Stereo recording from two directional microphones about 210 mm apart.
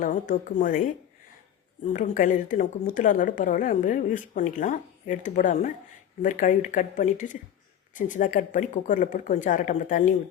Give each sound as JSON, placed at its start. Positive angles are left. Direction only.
{"t": 0.0, "sound": "a woman's voice", "side_deg": 40}